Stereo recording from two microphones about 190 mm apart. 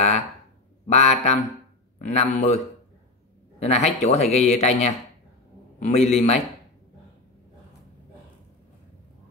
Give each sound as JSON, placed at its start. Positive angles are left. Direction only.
{"t": 0.8, "sound": "a man's voice", "side_deg": 35}